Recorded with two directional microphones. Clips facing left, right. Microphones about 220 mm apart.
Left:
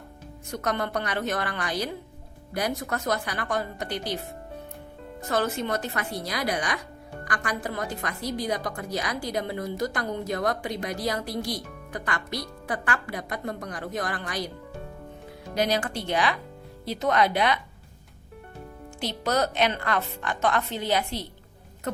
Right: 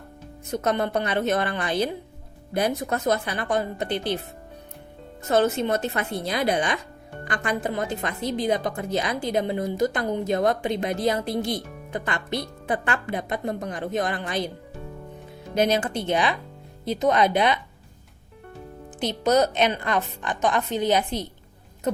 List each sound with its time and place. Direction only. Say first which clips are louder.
0.4 s speech: right 5 dB; 20° right (ahead or behind)
5.3 s speech: right 5 dB; 25° right (ahead or behind)
15.5 s speech: right 4 dB; 20° right (ahead or behind)
18.9 s speech: right 6 dB; 20° right (ahead or behind)